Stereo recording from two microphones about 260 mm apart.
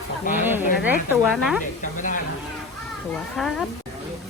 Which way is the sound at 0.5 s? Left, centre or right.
Centre.